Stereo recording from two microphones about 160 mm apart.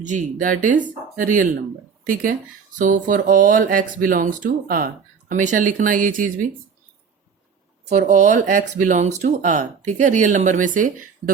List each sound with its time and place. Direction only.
0.0 s speech: 50° right (ahead or behind)
2.7 s speech: 55° right (ahead or behind)
7.9 s speech: 50° right (ahead or behind)